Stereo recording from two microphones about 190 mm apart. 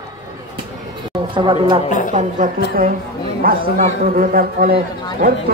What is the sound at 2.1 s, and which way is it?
A woman's voice, 45° right (ahead or behind).